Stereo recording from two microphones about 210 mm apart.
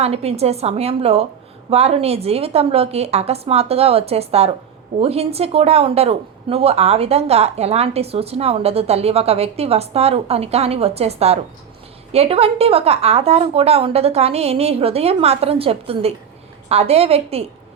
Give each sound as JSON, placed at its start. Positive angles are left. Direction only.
{"t": 0.0, "sound": "speech", "side_deg": -30}